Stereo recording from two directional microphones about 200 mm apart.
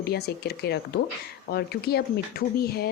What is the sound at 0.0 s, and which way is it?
Speech, 55° left (ahead or behind).